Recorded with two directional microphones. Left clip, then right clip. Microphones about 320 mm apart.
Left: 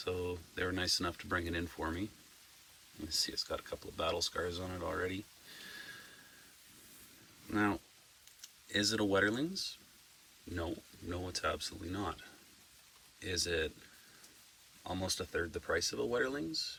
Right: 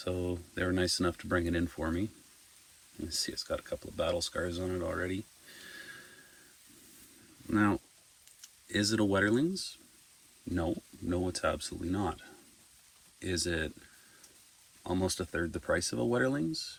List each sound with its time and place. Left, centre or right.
0.0 s speech: centre
3.1 s speech: centre
7.5 s speech: centre
11.1 s speech: centre
14.8 s speech: centre